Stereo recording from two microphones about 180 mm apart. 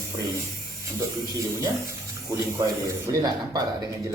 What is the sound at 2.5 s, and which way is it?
Speech, 15° right (ahead or behind).